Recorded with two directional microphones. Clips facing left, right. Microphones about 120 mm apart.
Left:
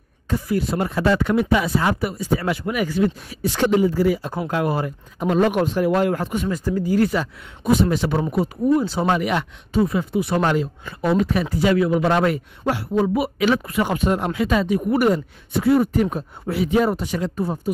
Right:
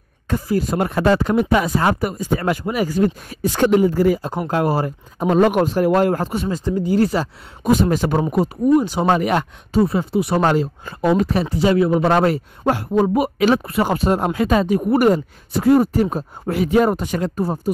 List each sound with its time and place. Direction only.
0.5 s speech: 40° right (ahead or behind)
0.7 s speech: 55° right (ahead or behind)
1.1 s speech: 40° right (ahead or behind)
2.6 s speech: 30° right (ahead or behind)
8.7 s speech: 15° right (ahead or behind)
9.0 s speech: 40° right (ahead or behind)
16.5 s speech: 50° right (ahead or behind)